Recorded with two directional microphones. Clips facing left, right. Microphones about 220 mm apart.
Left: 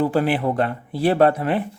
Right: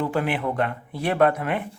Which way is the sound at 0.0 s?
35° left (ahead or behind).